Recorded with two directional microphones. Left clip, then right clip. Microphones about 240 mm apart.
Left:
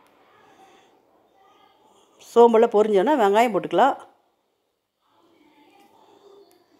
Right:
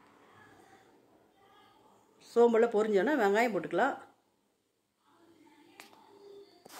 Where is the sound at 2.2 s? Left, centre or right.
Left.